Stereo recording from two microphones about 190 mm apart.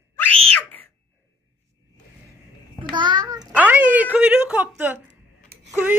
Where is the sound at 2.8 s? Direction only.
25° right (ahead or behind).